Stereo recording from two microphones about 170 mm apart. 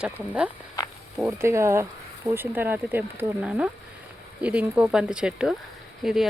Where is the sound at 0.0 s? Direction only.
5° right (ahead or behind).